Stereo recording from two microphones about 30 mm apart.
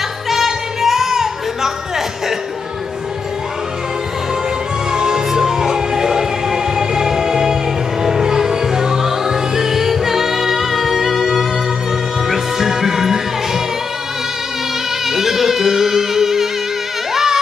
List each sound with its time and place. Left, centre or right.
0.3 s music: centre
4.9 s music: centre
15.0 s music: centre